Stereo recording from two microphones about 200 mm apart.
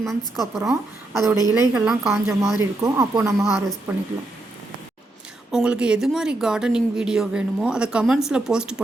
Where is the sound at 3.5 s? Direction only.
Centre (ahead or behind).